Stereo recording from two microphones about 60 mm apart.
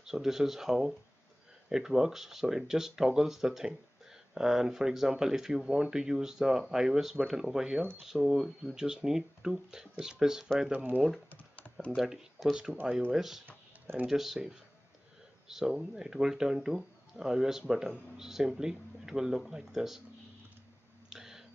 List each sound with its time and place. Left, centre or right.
0.0 s speech: centre
10.7 s speech: right
11.2 s typing: left
12.0 s speech: centre
21.1 s a sound: centre